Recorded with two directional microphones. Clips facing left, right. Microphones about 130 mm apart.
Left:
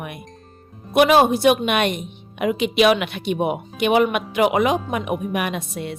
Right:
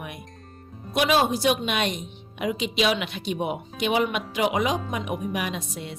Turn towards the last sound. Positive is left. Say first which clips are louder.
# left 5 dB
turn(degrees=60)  # may be behind; listen again after turning